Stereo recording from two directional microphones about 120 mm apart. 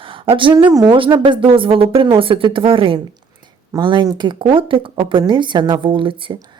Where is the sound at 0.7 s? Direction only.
30° right (ahead or behind).